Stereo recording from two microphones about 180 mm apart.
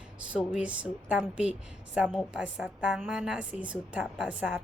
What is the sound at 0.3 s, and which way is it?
A woman's voice, 5° right (ahead or behind).